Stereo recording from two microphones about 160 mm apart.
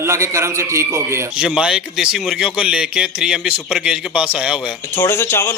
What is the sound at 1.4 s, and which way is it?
Speech, 5° right (ahead or behind).